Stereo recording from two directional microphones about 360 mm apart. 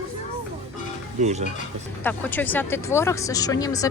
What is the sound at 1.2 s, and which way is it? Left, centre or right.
Speech, centre.